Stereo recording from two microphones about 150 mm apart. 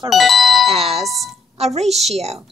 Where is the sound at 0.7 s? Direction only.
40° right (ahead or behind).